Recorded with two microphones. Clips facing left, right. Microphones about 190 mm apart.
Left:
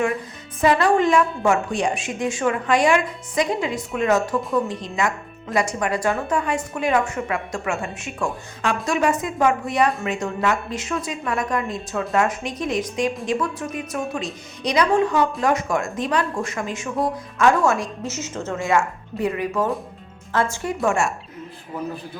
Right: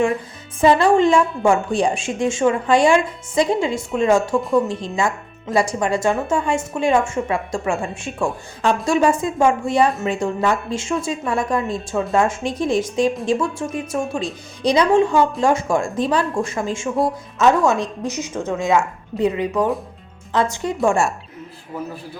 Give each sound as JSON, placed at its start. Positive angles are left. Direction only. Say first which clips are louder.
{"t": 0.6, "sound": "a woman's voice", "louder": "right 3 dB", "side_deg": -25}
{"t": 20.8, "sound": "a woman's voice", "louder": "right 3 dB", "side_deg": -35}